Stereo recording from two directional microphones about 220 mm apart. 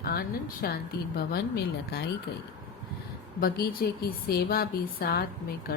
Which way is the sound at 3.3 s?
45° left (ahead or behind).